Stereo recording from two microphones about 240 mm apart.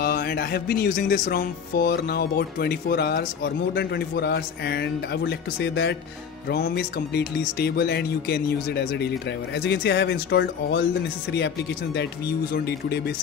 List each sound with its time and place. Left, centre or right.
0.0 s music: left
6.5 s speech: left